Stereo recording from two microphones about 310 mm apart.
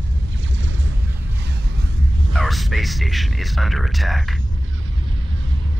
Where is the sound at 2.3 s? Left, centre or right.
Centre.